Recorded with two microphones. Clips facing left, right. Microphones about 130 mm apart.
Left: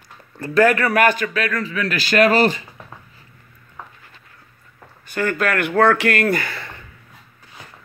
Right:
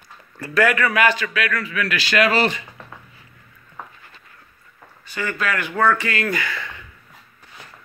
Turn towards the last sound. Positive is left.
turn(degrees=35)  # may be behind; listen again after turning